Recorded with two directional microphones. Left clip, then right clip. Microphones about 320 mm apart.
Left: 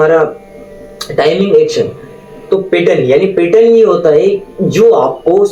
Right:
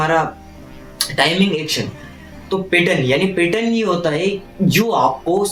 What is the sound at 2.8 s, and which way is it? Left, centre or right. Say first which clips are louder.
Speech: left 8 dB; right.